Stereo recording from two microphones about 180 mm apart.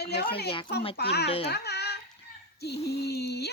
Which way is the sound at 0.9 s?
65° left (ahead or behind).